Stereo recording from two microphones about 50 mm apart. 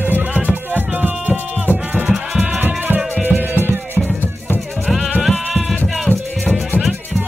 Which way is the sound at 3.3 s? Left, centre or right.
Right.